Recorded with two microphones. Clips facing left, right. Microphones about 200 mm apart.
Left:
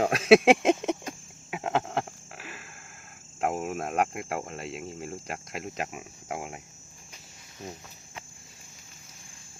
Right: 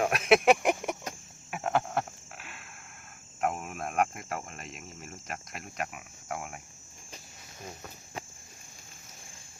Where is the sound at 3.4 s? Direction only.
30° left (ahead or behind).